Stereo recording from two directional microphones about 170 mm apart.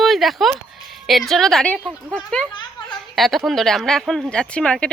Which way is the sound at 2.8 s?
25° left (ahead or behind).